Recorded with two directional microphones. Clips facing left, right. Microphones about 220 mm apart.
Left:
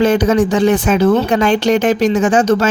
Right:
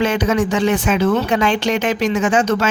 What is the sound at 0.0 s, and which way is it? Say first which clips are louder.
Speech: left 5 dB; 40° left (ahead or behind).